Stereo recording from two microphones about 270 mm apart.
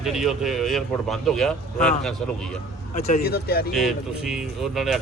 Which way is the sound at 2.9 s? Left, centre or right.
Left.